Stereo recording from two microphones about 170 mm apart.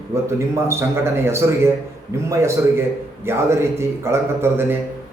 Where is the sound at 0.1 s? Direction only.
15° right (ahead or behind).